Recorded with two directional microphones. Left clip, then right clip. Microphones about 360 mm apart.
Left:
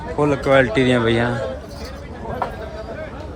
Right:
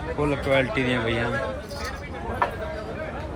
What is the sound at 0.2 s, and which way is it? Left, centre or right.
Speech, centre.